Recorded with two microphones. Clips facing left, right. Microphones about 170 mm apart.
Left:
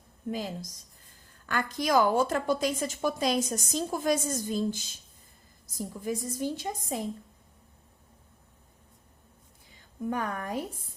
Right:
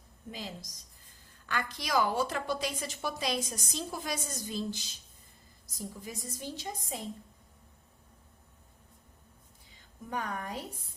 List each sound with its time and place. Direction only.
0.3 s a woman's voice: 50° left (ahead or behind)
10.2 s a woman's voice: 50° left (ahead or behind)